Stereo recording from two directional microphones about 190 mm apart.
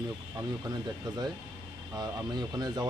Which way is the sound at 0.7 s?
20° right (ahead or behind).